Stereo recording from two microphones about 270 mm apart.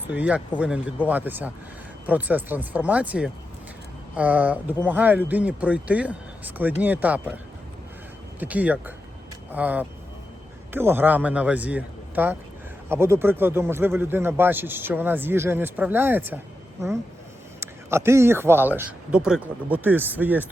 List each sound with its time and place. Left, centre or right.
0.1 s speech: centre
8.4 s a man's voice: centre
17.6 s a man's voice: centre